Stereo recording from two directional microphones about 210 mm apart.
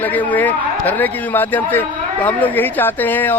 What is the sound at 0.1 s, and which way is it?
Speech, 10° left (ahead or behind).